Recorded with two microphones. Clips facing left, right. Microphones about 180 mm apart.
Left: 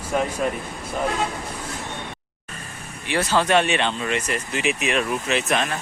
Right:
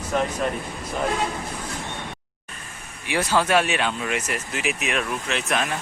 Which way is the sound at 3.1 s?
10° right (ahead or behind).